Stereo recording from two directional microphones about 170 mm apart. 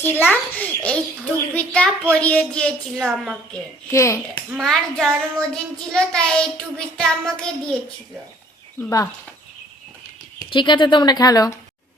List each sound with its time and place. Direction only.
0.0 s a child's voice: 10° left (ahead or behind)
2.1 s child singing: 5° left (ahead or behind)
3.9 s a child's voice: 15° left (ahead or behind)
4.5 s child singing: centre (ahead or behind)
8.8 s speech: 20° left (ahead or behind)
10.5 s speech: 30° left (ahead or behind)